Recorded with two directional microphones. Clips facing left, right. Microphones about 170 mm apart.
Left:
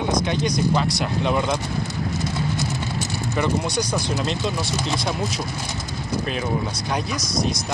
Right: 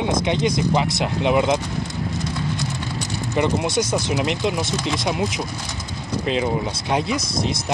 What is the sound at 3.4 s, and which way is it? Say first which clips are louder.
Speech: right 3 dB; 20° right (ahead or behind).